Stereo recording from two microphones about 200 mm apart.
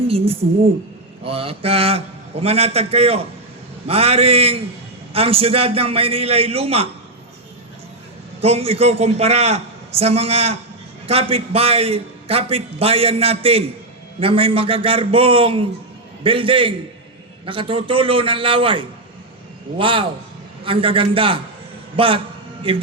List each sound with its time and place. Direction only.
1.2 s a man's voice: 30° right (ahead or behind)
8.4 s a man's voice: 30° right (ahead or behind)